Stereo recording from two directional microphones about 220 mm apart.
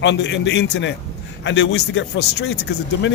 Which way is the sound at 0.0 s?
55° left (ahead or behind).